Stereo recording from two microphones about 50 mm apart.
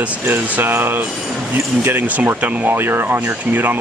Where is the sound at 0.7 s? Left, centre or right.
Right.